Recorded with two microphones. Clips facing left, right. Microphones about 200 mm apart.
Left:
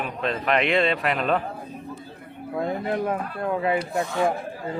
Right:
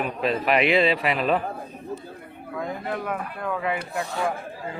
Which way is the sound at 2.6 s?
35° left (ahead or behind).